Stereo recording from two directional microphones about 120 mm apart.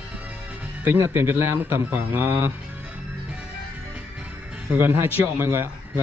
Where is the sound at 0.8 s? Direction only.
20° right (ahead or behind).